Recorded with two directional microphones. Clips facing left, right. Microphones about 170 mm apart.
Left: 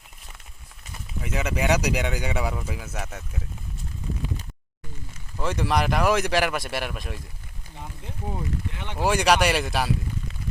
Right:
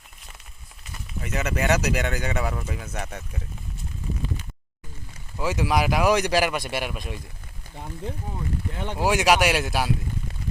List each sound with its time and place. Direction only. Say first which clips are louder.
1.2 s speech: even; 10° left (ahead or behind)
5.4 s speech: right 1 dB; 5° right (ahead or behind)
8.7 s speech: right 5 dB; 40° right (ahead or behind)
9.0 s speech: even; centre (ahead or behind)